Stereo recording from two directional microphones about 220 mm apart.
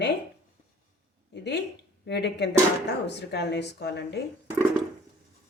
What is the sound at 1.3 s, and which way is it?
Speech, 50° left (ahead or behind).